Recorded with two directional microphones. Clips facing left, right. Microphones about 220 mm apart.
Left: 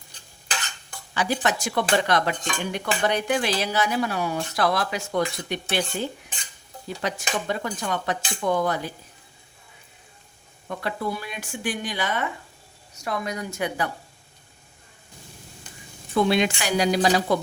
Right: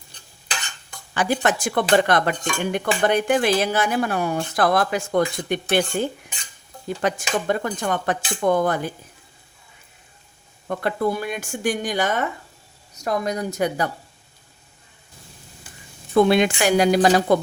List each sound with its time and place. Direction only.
1.1 s speech: 50° right (ahead or behind)
10.7 s a woman's voice: 50° right (ahead or behind)
16.3 s speech: 55° right (ahead or behind)